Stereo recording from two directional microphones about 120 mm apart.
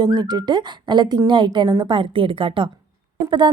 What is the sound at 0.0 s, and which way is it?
A woman's voice, 40° right (ahead or behind).